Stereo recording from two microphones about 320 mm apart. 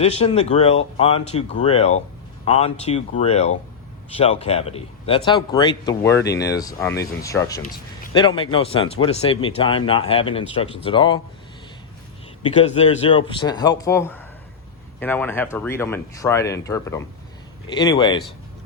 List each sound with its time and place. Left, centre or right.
0.0 s a man's voice: centre
6.2 s speech: left
6.5 s a man's voice: centre
12.4 s a man's voice: centre